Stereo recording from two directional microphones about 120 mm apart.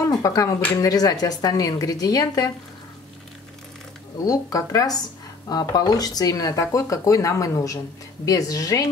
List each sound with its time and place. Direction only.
0.0 s a sound: 30° left (ahead or behind)
0.7 s speech: 30° left (ahead or behind)
4.2 s speech: 30° left (ahead or behind)